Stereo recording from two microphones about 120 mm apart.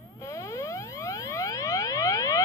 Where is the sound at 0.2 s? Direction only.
25° left (ahead or behind).